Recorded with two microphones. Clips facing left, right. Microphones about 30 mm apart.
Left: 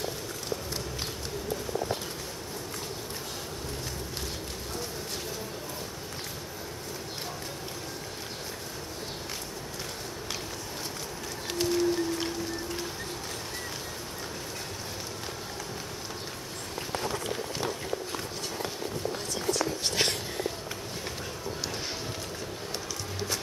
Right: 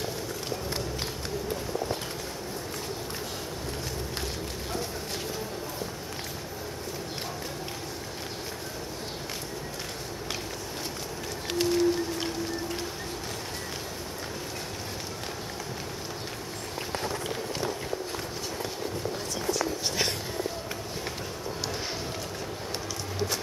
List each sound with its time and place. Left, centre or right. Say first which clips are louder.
11.5 s music: right 2 dB; centre
19.8 s a sound: left 1 dB; left
23.1 s music: right 3 dB; centre